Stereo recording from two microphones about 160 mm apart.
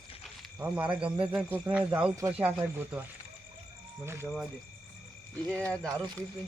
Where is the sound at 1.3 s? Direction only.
10° right (ahead or behind).